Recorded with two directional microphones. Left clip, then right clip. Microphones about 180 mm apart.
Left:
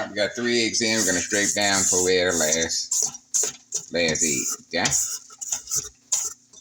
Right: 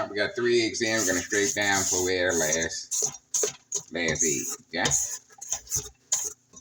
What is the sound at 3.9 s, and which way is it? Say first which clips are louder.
Speech: left 5 dB; 40° left (ahead or behind).